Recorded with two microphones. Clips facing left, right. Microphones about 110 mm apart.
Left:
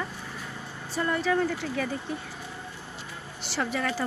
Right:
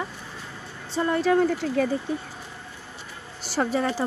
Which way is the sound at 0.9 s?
25° right (ahead or behind).